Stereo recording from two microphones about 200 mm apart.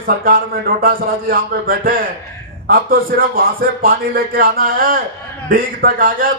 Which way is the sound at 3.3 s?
45° right (ahead or behind).